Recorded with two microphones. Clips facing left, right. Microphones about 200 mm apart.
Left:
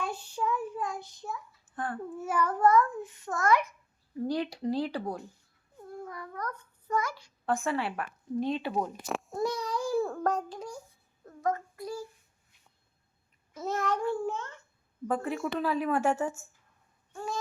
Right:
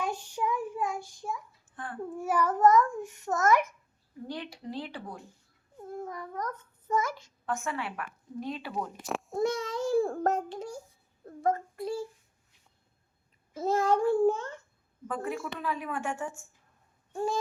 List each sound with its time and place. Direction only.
0.0 s child singing: 10° right (ahead or behind)
1.7 s babbling: 40° left (ahead or behind)
2.1 s a child's voice: 10° right (ahead or behind)
4.3 s a woman's voice: 40° left (ahead or behind)
5.9 s a child's voice: 20° right (ahead or behind)
7.4 s a woman's voice: 35° left (ahead or behind)
9.3 s a child's voice: 25° right (ahead or behind)
11.3 s child singing: 30° right (ahead or behind)
13.7 s a child's voice: 30° right (ahead or behind)
15.0 s a woman's voice: 35° left (ahead or behind)
17.1 s a sound: 30° right (ahead or behind)